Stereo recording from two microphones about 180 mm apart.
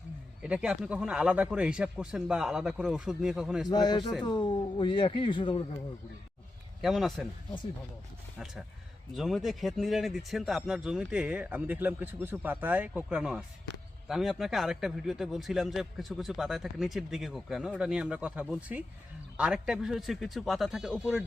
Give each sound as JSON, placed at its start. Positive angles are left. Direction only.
{"t": 0.4, "sound": "a man's voice", "side_deg": -5}
{"t": 3.7, "sound": "speech", "side_deg": 25}
{"t": 6.8, "sound": "a man's voice", "side_deg": 0}
{"t": 9.1, "sound": "a man's voice", "side_deg": 0}